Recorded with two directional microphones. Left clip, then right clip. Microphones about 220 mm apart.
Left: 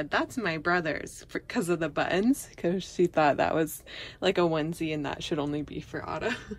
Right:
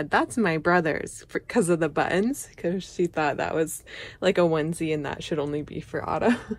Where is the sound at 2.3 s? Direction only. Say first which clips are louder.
Left 1 dB; 25° left (ahead or behind).